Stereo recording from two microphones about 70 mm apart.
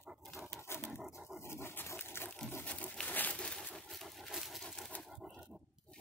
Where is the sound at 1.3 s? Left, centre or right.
Left.